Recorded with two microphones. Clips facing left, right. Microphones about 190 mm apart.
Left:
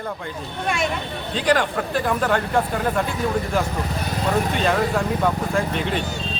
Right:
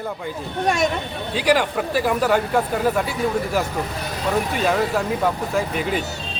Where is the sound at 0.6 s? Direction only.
40° right (ahead or behind).